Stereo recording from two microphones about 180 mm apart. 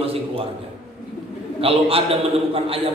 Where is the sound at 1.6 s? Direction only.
30° right (ahead or behind).